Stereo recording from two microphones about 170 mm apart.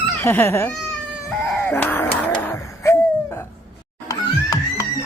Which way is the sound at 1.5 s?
10° left (ahead or behind).